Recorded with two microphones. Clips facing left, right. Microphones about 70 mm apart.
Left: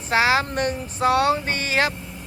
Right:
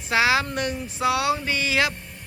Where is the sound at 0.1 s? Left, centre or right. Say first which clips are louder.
Left 2 dB; left.